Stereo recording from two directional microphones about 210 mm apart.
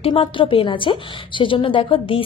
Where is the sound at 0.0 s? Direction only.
25° left (ahead or behind).